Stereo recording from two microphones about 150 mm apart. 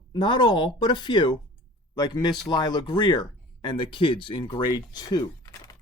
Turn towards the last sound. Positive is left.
turn(degrees=25)  # may be behind; listen again after turning